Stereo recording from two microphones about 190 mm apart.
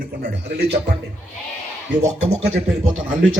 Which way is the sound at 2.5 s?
90° right.